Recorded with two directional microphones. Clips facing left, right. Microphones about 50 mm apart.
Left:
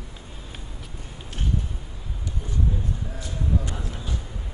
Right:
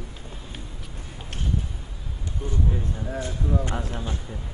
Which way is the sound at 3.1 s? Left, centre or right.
Right.